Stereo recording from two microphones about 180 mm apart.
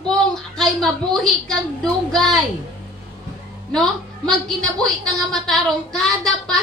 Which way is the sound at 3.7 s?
5° left (ahead or behind).